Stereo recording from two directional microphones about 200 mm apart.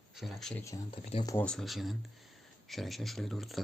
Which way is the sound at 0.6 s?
15° left (ahead or behind).